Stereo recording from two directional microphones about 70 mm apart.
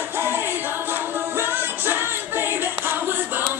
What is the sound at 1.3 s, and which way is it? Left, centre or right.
Music, right.